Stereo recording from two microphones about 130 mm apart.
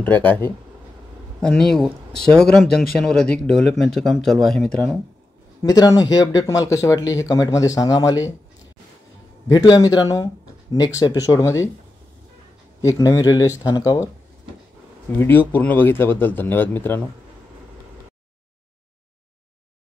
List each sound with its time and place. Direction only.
0.0 s speech: 15° left (ahead or behind)
1.4 s speech: 5° left (ahead or behind)
5.6 s speech: 30° left (ahead or behind)
9.5 s speech: 30° left (ahead or behind)
12.8 s speech: 25° left (ahead or behind)
15.1 s speech: 15° left (ahead or behind)